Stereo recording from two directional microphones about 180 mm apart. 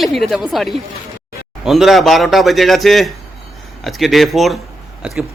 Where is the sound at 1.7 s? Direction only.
Centre (ahead or behind).